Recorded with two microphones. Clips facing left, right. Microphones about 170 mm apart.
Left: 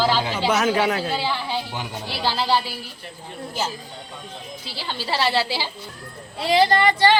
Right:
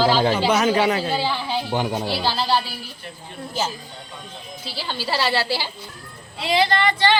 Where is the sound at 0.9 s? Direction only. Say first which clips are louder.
Right 2 dB; 10° right (ahead or behind).